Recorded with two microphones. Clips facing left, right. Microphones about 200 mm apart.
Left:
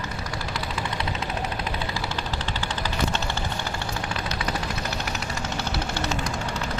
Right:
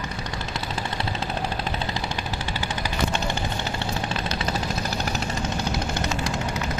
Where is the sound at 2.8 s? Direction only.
15° right (ahead or behind).